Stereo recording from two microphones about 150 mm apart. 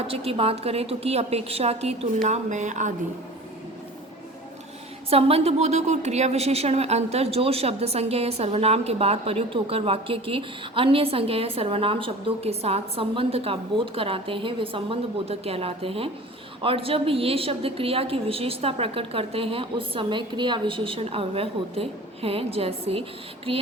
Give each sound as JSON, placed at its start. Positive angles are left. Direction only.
{"t": 0.0, "sound": "a woman's voice", "side_deg": -40}
{"t": 5.0, "sound": "a woman's voice", "side_deg": -40}